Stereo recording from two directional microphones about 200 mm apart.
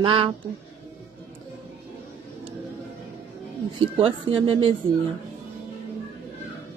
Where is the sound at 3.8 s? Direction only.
25° right (ahead or behind).